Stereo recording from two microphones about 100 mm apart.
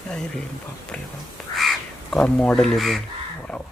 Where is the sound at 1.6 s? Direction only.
5° left (ahead or behind).